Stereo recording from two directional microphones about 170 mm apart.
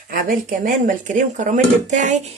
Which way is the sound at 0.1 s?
55° right (ahead or behind).